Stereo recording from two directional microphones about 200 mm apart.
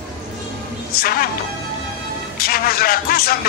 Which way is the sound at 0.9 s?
45° left (ahead or behind).